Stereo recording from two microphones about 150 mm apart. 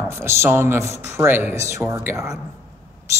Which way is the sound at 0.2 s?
15° right (ahead or behind).